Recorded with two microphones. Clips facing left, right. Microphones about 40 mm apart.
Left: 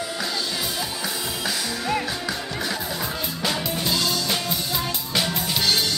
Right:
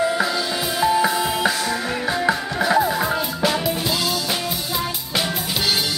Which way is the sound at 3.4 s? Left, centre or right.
Centre.